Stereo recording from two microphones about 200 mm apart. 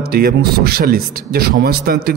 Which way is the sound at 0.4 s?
50° right (ahead or behind).